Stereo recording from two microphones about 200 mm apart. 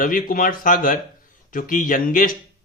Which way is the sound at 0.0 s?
45° left (ahead or behind).